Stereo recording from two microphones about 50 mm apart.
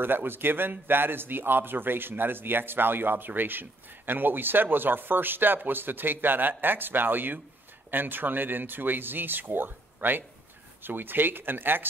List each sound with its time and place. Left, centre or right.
0.0 s speech: right